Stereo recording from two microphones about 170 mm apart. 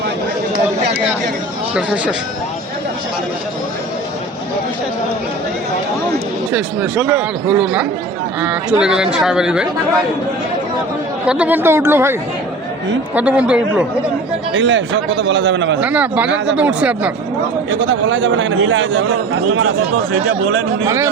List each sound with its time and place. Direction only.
1.7 s speech: 5° right (ahead or behind)
6.5 s speech: 10° right (ahead or behind)
11.3 s speech: 10° right (ahead or behind)
13.1 s speech: 10° right (ahead or behind)
14.5 s a man's voice: 90° right
15.8 s speech: 10° right (ahead or behind)
17.7 s a man's voice: 90° right
20.8 s speech: 15° right (ahead or behind)